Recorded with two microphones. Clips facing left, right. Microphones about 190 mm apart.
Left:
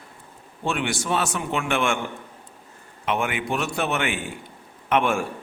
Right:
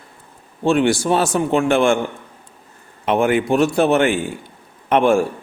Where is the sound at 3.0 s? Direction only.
35° right (ahead or behind).